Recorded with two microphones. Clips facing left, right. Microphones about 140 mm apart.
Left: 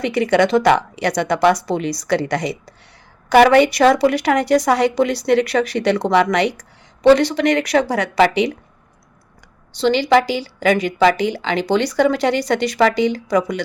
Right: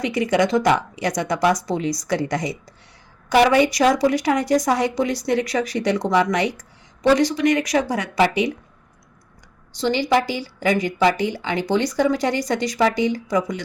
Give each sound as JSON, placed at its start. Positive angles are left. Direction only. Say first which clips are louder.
{"t": 0.0, "sound": "a woman's voice", "louder": "left 3 dB", "side_deg": 65}
{"t": 9.8, "sound": "a woman's voice", "louder": "left 5 dB", "side_deg": 75}